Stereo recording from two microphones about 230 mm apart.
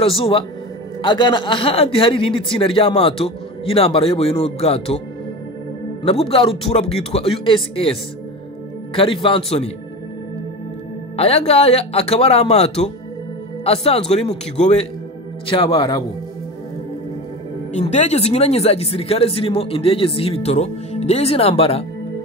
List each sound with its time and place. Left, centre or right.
0.0 s speech: left
6.2 s speech: left
8.9 s speech: left
11.1 s speech: left
17.7 s speech: left